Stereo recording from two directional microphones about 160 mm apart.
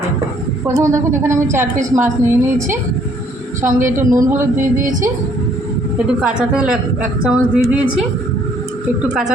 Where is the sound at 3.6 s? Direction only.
10° right (ahead or behind).